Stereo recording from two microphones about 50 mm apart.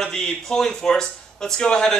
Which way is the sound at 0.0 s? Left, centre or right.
Centre.